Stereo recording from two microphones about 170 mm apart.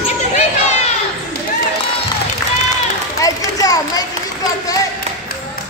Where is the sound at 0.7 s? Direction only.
40° left (ahead or behind).